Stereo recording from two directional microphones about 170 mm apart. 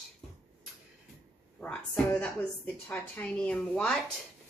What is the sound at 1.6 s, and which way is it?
A woman's voice, 5° left (ahead or behind).